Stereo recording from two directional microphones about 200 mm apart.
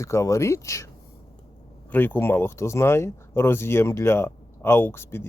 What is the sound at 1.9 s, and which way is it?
Speech, 10° left (ahead or behind).